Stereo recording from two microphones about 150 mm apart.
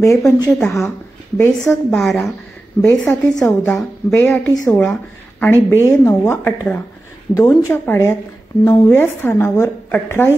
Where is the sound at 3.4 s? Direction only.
15° left (ahead or behind).